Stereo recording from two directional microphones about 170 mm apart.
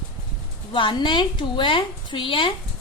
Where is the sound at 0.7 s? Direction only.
30° left (ahead or behind).